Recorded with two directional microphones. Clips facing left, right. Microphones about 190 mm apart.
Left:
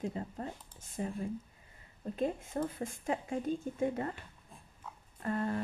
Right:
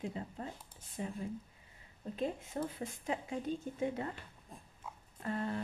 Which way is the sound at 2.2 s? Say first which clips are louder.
Left 3 dB; 50° left (ahead or behind).